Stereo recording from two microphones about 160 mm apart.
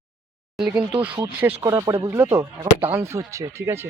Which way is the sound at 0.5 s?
5° right (ahead or behind).